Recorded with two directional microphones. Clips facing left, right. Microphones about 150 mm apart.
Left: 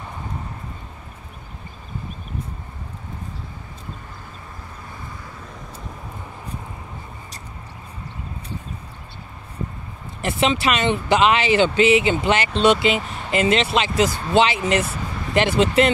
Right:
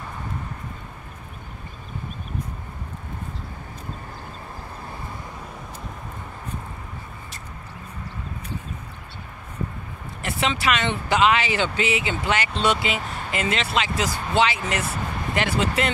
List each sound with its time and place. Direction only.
10.2 s speech: 20° left (ahead or behind)